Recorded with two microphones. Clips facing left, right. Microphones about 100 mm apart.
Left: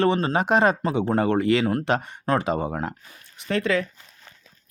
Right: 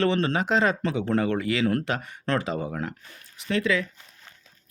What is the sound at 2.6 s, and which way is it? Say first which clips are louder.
Speech: left 3 dB; 40° left (ahead or behind).